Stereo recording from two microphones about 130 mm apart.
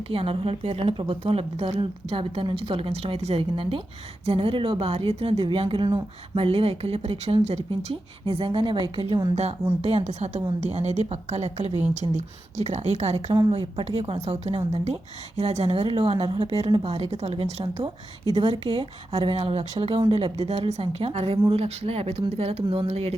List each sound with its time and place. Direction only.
0.1 s speech: 45° right (ahead or behind)
9.3 s a woman's voice: 55° right (ahead or behind)